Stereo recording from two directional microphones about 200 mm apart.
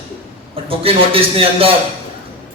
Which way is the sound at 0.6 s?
30° right (ahead or behind).